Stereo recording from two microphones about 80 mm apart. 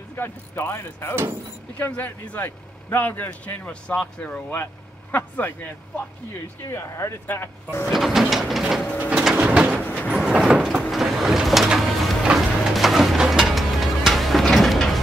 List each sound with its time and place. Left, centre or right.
0.1 s speech: left
1.8 s speech: centre
6.6 s speech: left
7.8 s printer: centre
9.1 s bird: centre
9.8 s vehicle: centre
10.0 s sliding door: centre
10.9 s printer: centre
12.4 s music: centre